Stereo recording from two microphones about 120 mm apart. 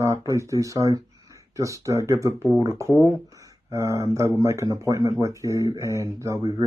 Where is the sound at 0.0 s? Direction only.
25° right (ahead or behind).